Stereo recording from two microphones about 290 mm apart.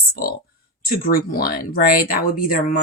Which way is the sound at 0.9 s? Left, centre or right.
Left.